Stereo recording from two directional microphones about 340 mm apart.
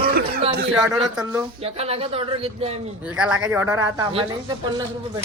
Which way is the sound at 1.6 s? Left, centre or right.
Centre.